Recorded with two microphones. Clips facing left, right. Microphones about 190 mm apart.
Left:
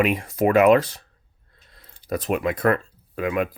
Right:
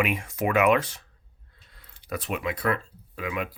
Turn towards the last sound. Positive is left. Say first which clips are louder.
# left 8 dB
turn(degrees=50)  # may be behind; listen again after turning